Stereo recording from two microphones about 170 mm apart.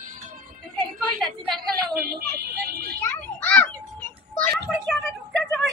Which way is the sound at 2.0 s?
65° right (ahead or behind).